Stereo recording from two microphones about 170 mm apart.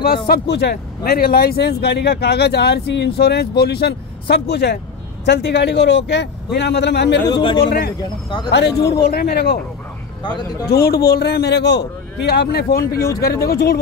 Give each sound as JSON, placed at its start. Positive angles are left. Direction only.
{"t": 0.0, "sound": "speech", "side_deg": 60}
{"t": 5.2, "sound": "a man's voice", "side_deg": 90}
{"t": 7.3, "sound": "speech", "side_deg": 30}
{"t": 7.6, "sound": "speech", "side_deg": 70}
{"t": 8.5, "sound": "a man's voice", "side_deg": 90}
{"t": 9.0, "sound": "speech", "side_deg": 70}
{"t": 10.2, "sound": "speech", "side_deg": 25}
{"t": 10.7, "sound": "speech", "side_deg": 65}
{"t": 12.3, "sound": "speech", "side_deg": 70}